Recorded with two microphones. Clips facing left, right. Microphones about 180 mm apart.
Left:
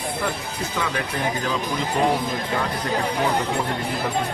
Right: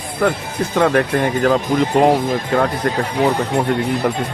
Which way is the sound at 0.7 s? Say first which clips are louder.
Right 13 dB; 60° right (ahead or behind).